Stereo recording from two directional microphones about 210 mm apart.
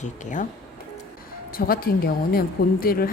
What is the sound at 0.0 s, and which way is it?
Speech, 35° left (ahead or behind).